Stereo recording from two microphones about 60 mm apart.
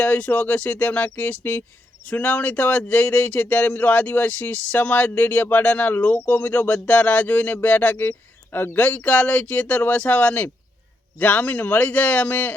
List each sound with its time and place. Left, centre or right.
0.0 s speech: left